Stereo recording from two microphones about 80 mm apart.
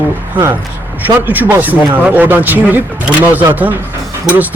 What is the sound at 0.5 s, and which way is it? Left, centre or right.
Speech, right.